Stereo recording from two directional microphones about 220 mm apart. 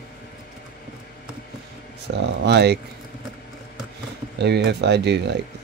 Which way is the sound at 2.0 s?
50° right (ahead or behind).